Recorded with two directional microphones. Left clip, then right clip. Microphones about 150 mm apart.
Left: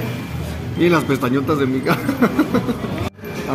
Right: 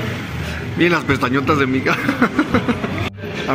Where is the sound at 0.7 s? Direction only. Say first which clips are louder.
Even; 5° left (ahead or behind).